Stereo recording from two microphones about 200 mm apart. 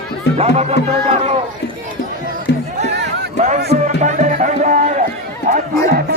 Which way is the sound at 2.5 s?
60° left (ahead or behind).